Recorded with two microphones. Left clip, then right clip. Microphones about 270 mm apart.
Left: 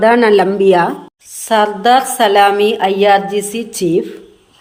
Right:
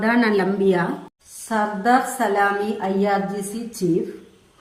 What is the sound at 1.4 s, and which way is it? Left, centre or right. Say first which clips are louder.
A woman's voice: left 9 dB; left.